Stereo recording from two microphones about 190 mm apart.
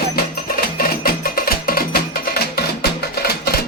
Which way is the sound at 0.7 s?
50° left (ahead or behind).